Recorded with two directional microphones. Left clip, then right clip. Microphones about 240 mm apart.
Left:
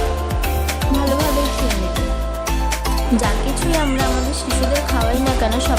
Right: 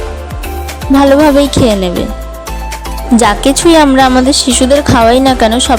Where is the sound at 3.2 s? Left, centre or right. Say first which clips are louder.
Right 13 dB; right.